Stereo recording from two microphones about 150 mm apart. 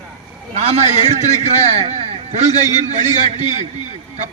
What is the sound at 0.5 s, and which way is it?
A man's voice, 45° right (ahead or behind).